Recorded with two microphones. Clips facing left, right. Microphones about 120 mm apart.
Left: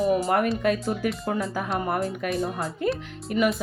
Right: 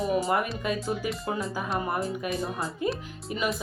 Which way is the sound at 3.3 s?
60° left (ahead or behind).